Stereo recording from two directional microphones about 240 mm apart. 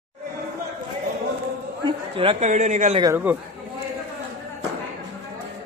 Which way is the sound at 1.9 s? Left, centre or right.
Right.